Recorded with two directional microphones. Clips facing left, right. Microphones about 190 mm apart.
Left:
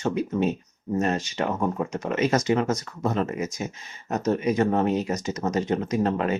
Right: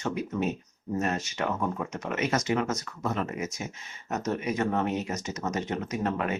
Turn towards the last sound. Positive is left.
turn(degrees=30)  # may be behind; listen again after turning